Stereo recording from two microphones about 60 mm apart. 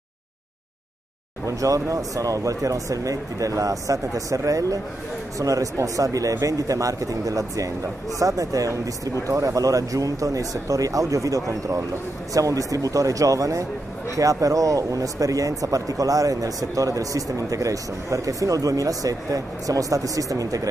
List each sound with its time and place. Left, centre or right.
1.4 s speech: right